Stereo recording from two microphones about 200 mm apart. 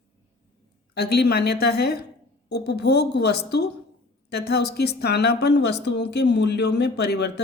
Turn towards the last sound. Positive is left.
turn(degrees=55)  # may be behind; listen again after turning